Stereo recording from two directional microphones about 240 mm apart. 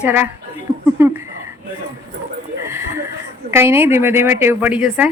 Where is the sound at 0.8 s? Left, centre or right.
Centre.